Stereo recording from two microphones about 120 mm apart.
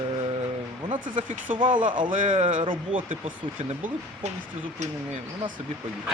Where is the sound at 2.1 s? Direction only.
90° right.